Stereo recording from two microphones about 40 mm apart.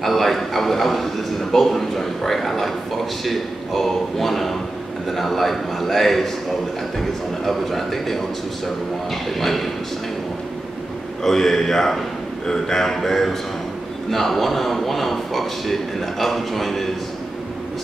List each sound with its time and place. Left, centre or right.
0.0 s a man's voice: centre
11.2 s a man's voice: centre